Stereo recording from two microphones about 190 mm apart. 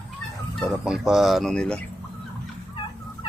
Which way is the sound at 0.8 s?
5° right (ahead or behind).